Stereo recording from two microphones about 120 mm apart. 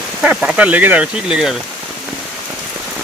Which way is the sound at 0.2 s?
10° right (ahead or behind).